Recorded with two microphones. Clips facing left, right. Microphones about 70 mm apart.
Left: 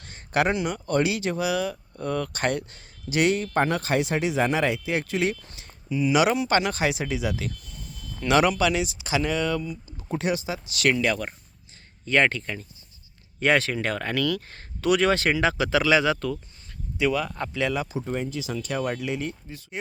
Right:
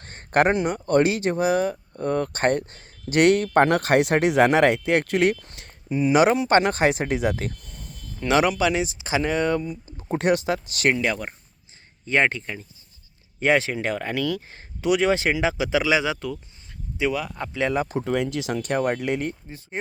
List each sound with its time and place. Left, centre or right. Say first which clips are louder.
0.0 s speech: right 4 dB; right
3.1 s speech: right 5 dB; right
8.2 s speech: right 1 dB; right
10.9 s speech: even; centre
17.5 s speech: right 3 dB; right
17.7 s speech: right 4 dB; right
18.1 s speech: right 5 dB; right
19.5 s speech: right 3 dB; right